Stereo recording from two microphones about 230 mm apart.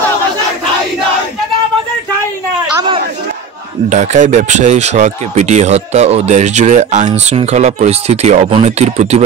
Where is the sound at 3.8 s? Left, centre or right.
Right.